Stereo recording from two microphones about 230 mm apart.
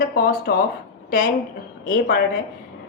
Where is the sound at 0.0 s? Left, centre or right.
Left.